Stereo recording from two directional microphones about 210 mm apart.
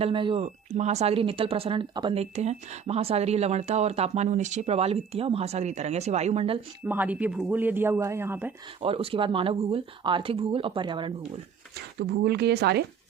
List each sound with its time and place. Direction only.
0.0 s speech: 25° right (ahead or behind)
6.8 s speech: 10° right (ahead or behind)
8.8 s speech: 25° right (ahead or behind)
11.9 s speech: 50° right (ahead or behind)